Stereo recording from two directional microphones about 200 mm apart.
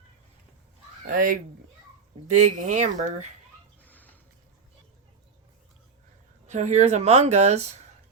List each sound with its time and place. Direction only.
1.0 s speech: 45° right (ahead or behind)
3.8 s a sound: 10° left (ahead or behind)
6.5 s speech: 35° right (ahead or behind)